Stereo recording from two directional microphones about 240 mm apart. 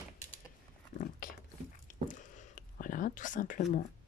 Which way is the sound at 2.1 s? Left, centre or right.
Left.